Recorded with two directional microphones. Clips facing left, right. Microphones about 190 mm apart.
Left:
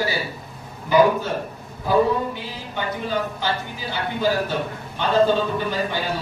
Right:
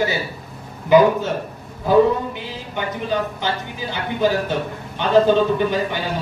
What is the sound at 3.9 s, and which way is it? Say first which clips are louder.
Speech: right 3 dB; 20° right (ahead or behind).